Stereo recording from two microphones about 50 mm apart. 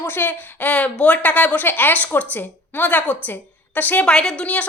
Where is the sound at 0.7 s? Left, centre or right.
Left.